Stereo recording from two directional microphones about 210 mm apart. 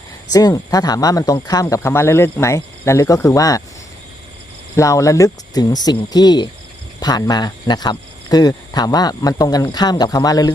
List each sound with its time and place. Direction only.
0.3 s speech: 15° left (ahead or behind)
4.8 s speech: 15° left (ahead or behind)